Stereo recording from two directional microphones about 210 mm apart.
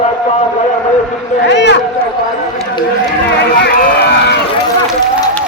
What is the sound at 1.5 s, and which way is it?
Speech, 55° left (ahead or behind).